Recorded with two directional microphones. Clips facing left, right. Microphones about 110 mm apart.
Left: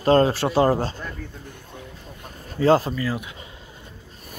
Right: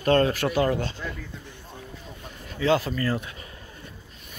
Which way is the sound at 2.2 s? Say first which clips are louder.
Left 6 dB; 40° left (ahead or behind).